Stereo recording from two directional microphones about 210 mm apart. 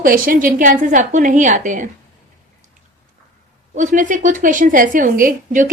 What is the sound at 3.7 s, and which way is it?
A woman's voice, 35° right (ahead or behind).